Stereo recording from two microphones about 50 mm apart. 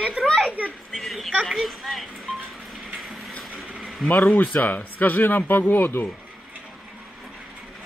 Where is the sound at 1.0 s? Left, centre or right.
Centre.